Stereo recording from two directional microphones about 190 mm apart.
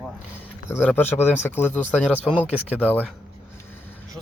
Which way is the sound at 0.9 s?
10° left (ahead or behind).